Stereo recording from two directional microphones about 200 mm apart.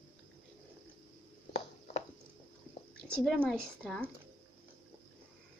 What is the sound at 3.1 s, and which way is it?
Speech, centre (ahead or behind).